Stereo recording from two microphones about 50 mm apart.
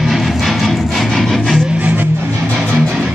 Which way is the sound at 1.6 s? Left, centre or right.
Right.